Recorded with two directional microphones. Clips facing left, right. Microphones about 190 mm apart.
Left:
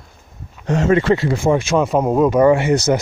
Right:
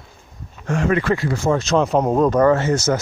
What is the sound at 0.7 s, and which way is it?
Speech, 25° left (ahead or behind).